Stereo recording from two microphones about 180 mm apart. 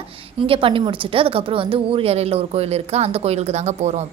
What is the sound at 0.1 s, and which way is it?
A woman's voice, 30° right (ahead or behind).